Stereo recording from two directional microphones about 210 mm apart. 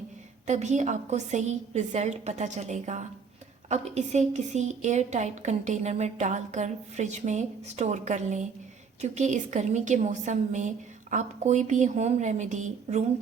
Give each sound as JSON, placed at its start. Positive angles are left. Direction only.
{"t": 0.4, "sound": "a woman's voice", "side_deg": -35}